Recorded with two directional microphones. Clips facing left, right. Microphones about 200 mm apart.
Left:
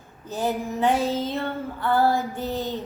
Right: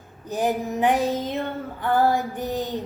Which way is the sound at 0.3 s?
15° right (ahead or behind).